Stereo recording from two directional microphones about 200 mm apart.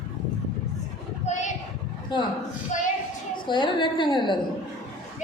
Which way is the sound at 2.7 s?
35° left (ahead or behind).